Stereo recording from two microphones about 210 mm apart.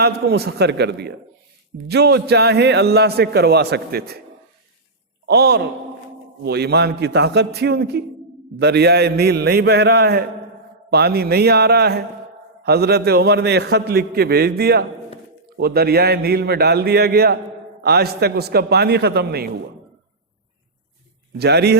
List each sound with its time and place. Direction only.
0.0 s a man's voice: 50° right (ahead or behind)
5.2 s a man's voice: 50° right (ahead or behind)
21.3 s a man's voice: 50° right (ahead or behind)